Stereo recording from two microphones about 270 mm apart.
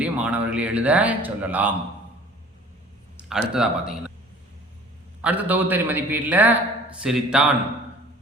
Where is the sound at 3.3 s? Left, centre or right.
Centre.